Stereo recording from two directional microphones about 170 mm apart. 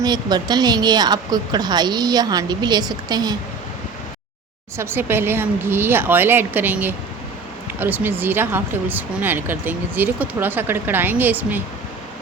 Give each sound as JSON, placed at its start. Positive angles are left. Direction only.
{"t": 0.0, "sound": "speech", "side_deg": -25}
{"t": 4.8, "sound": "speech", "side_deg": -15}